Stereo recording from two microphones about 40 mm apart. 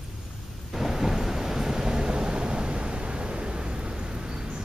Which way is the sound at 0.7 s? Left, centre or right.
Centre.